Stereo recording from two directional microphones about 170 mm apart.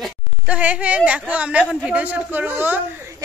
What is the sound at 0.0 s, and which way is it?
A woman's voice, 5° right (ahead or behind).